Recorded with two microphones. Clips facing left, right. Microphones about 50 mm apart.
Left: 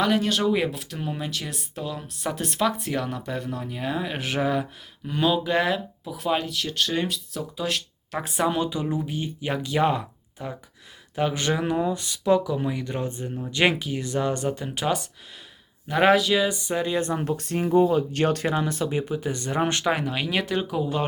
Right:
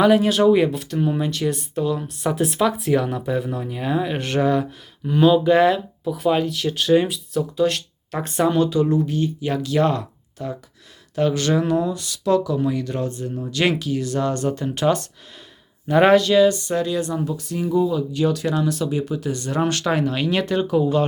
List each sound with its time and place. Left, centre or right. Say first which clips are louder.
0.0 s speech: right 7 dB; centre
17.2 s speech: right 1 dB; left
18.4 s speech: right 3 dB; left
19.8 s speech: right 4 dB; centre